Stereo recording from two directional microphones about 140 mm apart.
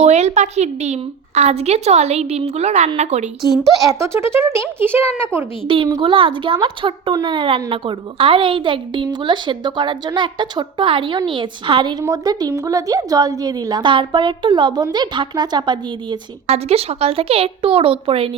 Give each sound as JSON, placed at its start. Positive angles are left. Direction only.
{"t": 0.0, "sound": "a woman's voice", "side_deg": -55}
{"t": 3.8, "sound": "a woman's voice", "side_deg": -20}
{"t": 5.6, "sound": "a child's voice", "side_deg": -35}
{"t": 16.5, "sound": "a woman's voice", "side_deg": -45}